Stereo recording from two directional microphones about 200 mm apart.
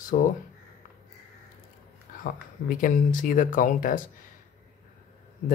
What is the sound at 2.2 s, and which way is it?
Speech, 45° left (ahead or behind).